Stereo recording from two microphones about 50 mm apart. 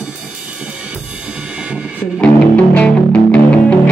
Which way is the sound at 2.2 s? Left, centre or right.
Left.